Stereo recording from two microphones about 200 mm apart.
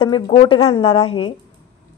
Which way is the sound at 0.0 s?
25° left (ahead or behind).